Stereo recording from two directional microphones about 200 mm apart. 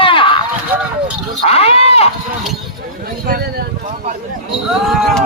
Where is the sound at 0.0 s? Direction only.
25° left (ahead or behind).